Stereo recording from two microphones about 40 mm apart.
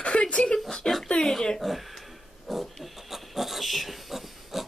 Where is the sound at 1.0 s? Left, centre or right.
Left.